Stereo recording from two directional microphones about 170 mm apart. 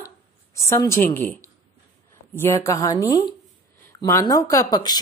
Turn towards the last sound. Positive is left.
turn(degrees=25)  # may be behind; listen again after turning